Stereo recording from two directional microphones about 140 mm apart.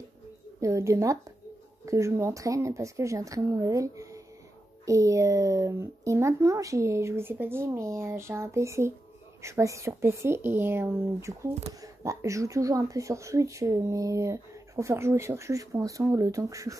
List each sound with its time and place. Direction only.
0.6 s speech: 20° right (ahead or behind)